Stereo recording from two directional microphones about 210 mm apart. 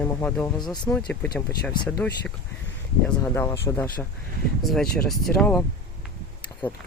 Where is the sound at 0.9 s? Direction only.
5° left (ahead or behind).